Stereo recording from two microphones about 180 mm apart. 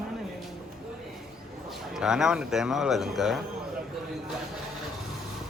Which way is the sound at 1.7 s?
5° right (ahead or behind).